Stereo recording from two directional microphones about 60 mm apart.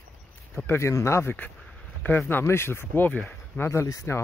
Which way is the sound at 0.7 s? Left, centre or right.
Left.